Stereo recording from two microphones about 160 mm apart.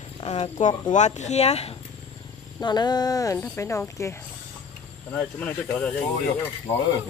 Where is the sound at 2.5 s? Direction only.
25° left (ahead or behind).